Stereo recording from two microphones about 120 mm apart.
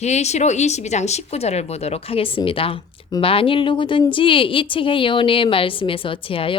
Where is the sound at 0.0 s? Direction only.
65° left (ahead or behind).